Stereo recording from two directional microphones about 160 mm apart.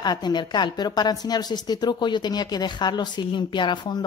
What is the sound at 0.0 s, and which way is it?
A woman's voice, 25° left (ahead or behind).